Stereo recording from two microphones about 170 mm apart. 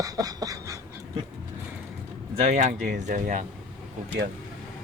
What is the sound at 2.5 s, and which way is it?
Speech, 45° right (ahead or behind).